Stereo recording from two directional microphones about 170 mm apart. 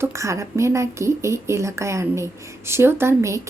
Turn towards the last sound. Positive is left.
turn(degrees=-15)  # may be behind; listen again after turning